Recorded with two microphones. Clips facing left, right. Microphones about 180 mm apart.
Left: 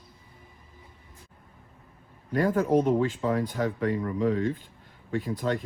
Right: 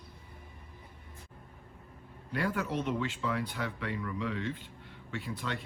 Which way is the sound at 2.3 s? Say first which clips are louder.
Left 10 dB; 45° left (ahead or behind).